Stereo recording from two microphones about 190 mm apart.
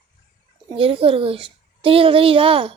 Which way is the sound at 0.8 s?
30° right (ahead or behind).